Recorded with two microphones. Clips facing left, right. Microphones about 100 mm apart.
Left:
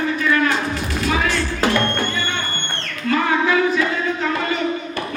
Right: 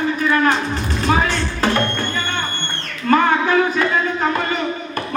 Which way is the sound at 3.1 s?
45° right (ahead or behind).